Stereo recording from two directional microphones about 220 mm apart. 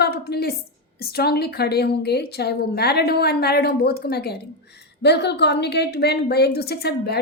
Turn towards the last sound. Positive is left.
turn(degrees=45)  # may be behind; listen again after turning